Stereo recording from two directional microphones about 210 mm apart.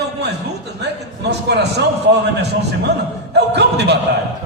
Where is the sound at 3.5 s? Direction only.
55° right (ahead or behind).